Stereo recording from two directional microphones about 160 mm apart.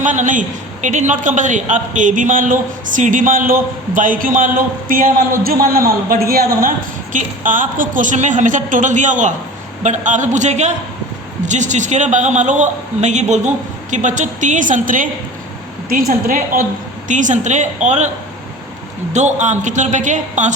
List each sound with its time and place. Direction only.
0.0 s a man's voice: 50° right (ahead or behind)
17.1 s a woman's voice: 50° right (ahead or behind)
19.1 s a woman's voice: 50° right (ahead or behind)